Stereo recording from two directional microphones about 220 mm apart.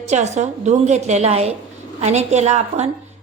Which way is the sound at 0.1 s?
30° right (ahead or behind).